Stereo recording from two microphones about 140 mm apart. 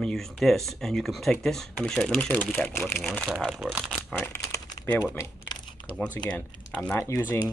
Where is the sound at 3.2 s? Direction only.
Centre (ahead or behind).